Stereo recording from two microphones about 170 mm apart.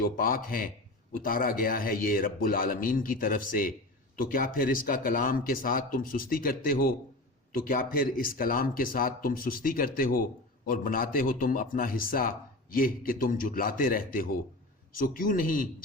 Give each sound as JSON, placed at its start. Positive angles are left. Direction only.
{"t": 0.0, "sound": "speech", "side_deg": 60}